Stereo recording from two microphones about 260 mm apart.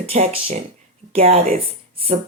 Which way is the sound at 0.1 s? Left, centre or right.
Right.